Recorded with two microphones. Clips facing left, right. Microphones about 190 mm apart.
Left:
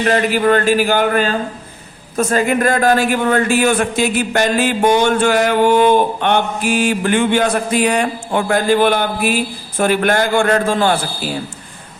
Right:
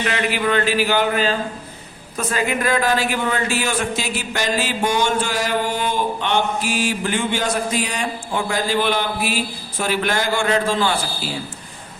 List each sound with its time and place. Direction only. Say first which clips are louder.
0.0 s a man's voice: left 7 dB; 45° left (ahead or behind)